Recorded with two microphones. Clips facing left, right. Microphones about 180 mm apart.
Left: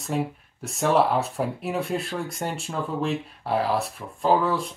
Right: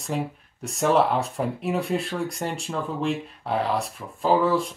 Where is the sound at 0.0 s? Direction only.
Centre (ahead or behind).